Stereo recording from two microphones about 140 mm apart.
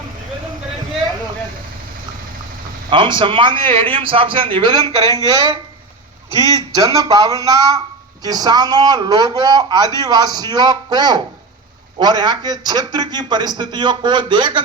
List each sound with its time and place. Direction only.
2.9 s a man's voice: 35° right (ahead or behind)
6.8 s a man's voice: 25° right (ahead or behind)